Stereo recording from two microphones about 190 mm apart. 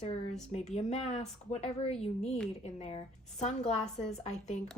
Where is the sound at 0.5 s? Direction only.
35° left (ahead or behind).